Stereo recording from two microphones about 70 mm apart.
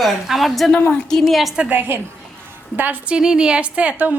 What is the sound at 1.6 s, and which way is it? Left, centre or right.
Speech, right.